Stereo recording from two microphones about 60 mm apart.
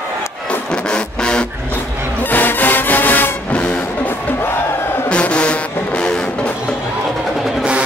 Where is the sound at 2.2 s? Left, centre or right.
Left.